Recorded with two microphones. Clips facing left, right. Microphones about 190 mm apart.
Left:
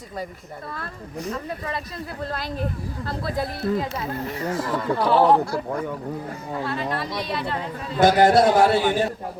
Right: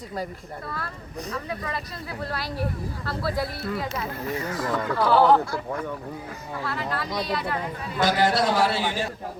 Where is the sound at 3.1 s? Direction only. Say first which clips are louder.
Even; 20° left (ahead or behind).